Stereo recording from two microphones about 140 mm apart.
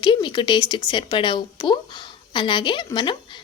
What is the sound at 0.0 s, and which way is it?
A woman's voice, 35° left (ahead or behind).